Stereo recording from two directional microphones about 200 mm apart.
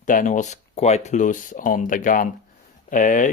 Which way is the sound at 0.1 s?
40° left (ahead or behind).